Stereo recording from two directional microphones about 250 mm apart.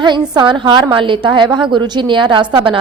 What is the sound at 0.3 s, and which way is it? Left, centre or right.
A woman's voice, centre.